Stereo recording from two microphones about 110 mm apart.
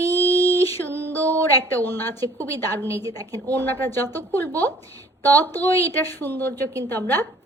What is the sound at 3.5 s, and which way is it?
A woman's voice, 20° left (ahead or behind).